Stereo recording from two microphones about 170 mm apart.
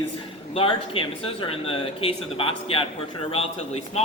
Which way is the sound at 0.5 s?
30° left (ahead or behind).